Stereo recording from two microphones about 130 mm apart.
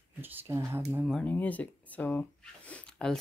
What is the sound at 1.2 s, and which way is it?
Speech, 10° left (ahead or behind).